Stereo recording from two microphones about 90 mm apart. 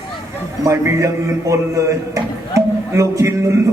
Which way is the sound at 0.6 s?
35° right (ahead or behind).